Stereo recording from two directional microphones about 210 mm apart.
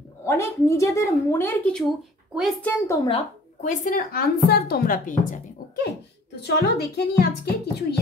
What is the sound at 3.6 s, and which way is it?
Speech, 40° left (ahead or behind).